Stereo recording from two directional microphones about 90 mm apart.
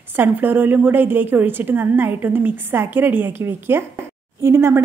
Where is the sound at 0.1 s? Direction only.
25° right (ahead or behind).